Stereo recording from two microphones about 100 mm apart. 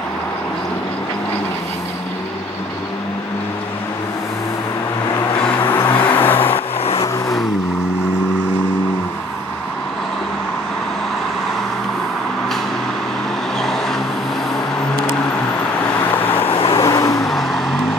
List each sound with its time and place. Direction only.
5.6 s vehicle: 20° left (ahead or behind)
13.6 s vehicle: 5° left (ahead or behind)
16.4 s vehicle: 70° left (ahead or behind)
16.8 s vehicle: 35° left (ahead or behind)
17.3 s vehicle: centre (ahead or behind)